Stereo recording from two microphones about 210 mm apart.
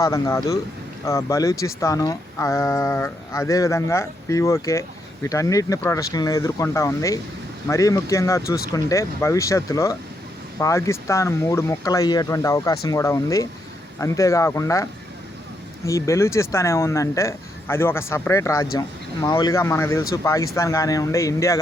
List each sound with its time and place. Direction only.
0.0 s speech: 15° left (ahead or behind)
15.9 s speech: 15° left (ahead or behind)